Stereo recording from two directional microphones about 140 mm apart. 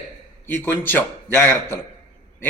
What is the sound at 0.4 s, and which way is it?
Speech, 15° left (ahead or behind).